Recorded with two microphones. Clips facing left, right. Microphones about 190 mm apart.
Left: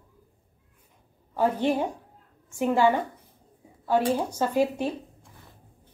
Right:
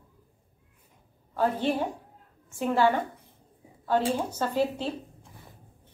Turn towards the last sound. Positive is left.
turn(degrees=15)  # may be behind; listen again after turning